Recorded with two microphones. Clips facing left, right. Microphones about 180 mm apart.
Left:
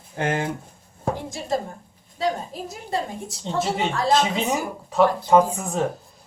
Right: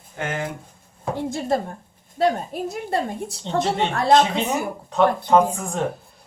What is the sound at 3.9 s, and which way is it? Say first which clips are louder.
Speech: right 5 dB; 60° right (ahead or behind).